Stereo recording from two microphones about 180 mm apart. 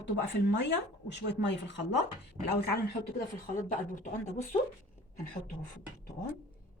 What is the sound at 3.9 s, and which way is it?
Speech, 40° left (ahead or behind).